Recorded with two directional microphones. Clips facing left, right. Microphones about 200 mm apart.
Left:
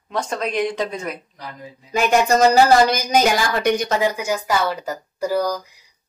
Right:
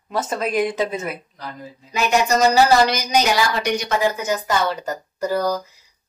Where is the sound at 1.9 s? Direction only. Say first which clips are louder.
Left 2 dB; 50° left (ahead or behind).